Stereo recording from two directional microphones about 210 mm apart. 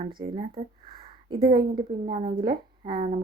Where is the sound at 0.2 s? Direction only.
25° right (ahead or behind).